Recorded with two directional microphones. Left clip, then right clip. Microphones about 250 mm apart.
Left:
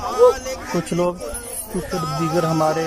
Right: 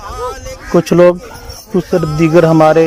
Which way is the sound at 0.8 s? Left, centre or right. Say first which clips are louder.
Right 15 dB; right.